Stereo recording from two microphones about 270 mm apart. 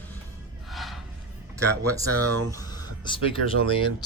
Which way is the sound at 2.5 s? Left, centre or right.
Centre.